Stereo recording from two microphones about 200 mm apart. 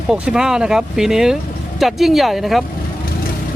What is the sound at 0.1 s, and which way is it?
Speech, 5° right (ahead or behind).